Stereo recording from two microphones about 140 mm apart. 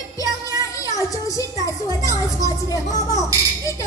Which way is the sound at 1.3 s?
25° left (ahead or behind).